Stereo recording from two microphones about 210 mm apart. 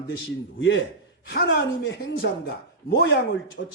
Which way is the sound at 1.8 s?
50° left (ahead or behind).